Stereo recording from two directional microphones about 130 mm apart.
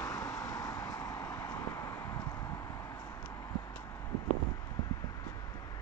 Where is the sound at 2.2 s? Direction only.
25° left (ahead or behind).